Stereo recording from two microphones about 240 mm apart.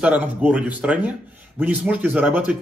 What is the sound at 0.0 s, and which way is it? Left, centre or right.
A man's voice, centre.